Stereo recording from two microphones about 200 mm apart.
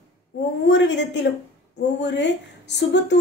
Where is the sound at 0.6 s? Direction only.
60° left (ahead or behind).